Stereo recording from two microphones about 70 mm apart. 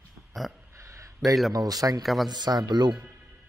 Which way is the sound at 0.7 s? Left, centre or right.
Right.